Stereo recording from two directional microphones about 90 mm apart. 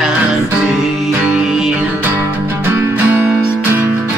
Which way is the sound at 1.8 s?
20° right (ahead or behind).